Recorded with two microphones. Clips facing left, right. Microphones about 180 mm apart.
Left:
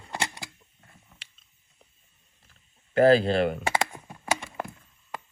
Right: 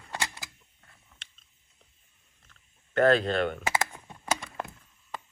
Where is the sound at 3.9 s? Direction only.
15° left (ahead or behind).